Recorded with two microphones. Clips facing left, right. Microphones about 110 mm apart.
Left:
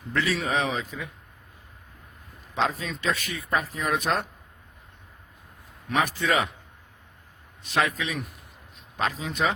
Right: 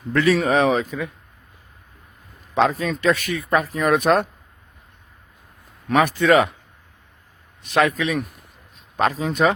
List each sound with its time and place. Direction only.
0.1 s speech: 60° right (ahead or behind)
2.6 s speech: 60° right (ahead or behind)
5.9 s speech: 60° right (ahead or behind)
7.6 s speech: 60° right (ahead or behind)
9.0 s speech: 50° right (ahead or behind)